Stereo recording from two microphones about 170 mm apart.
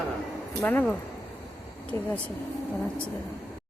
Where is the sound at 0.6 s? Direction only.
10° left (ahead or behind).